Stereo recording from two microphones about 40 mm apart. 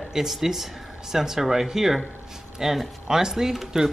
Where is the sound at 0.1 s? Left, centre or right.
Centre.